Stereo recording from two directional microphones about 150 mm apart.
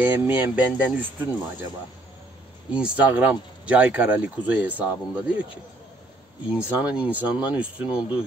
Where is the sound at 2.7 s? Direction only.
10° right (ahead or behind).